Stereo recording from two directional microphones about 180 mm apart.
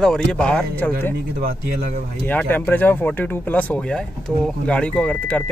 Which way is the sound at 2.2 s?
10° left (ahead or behind).